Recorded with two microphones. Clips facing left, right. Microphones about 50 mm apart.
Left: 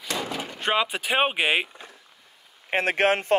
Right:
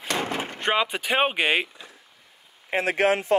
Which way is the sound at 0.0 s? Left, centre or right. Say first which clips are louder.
Right 3 dB; right.